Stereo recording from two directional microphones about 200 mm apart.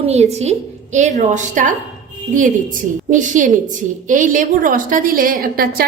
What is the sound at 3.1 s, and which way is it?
A woman's voice, 40° right (ahead or behind).